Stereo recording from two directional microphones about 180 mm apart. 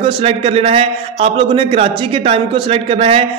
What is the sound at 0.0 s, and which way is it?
A man's voice, 30° right (ahead or behind).